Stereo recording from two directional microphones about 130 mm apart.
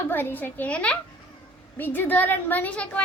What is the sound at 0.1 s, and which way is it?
Speech, 15° left (ahead or behind).